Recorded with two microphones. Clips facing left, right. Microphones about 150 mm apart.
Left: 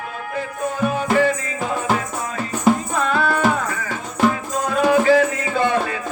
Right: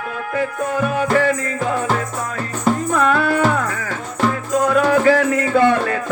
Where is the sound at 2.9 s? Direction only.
55° right (ahead or behind).